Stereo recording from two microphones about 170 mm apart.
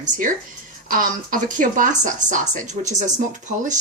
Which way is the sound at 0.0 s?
50° right (ahead or behind).